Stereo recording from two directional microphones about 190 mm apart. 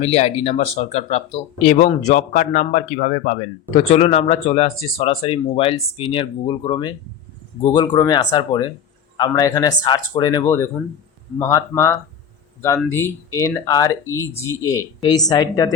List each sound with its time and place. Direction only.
0.0 s speech: 35° left (ahead or behind)